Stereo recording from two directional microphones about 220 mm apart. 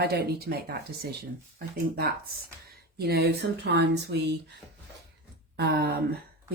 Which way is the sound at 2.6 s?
45° right (ahead or behind).